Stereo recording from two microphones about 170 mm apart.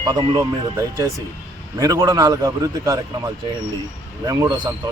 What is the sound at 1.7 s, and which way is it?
Speech, 20° right (ahead or behind).